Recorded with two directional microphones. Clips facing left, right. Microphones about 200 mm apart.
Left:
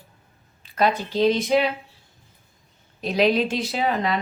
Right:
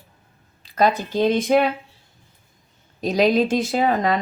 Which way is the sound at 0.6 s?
45° right (ahead or behind).